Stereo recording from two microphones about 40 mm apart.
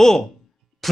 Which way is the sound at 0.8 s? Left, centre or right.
Centre.